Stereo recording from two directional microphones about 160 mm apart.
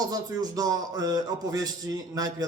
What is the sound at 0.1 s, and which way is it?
Speech, 25° right (ahead or behind).